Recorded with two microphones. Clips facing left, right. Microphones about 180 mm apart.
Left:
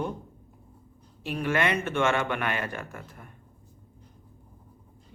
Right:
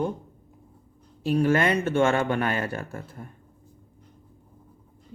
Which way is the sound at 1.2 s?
35° right (ahead or behind).